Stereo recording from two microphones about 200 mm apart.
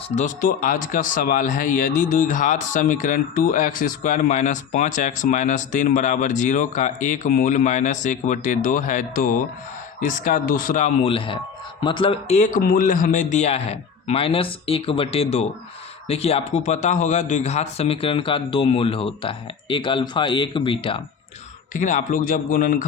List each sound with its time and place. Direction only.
0.2 s a man's voice: 40° left (ahead or behind); by 21.0 s 25° left (ahead or behind)
21.7 s a man's voice: 40° left (ahead or behind)